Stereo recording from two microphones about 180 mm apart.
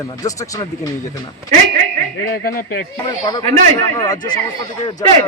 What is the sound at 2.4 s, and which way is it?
Speech, 60° left (ahead or behind).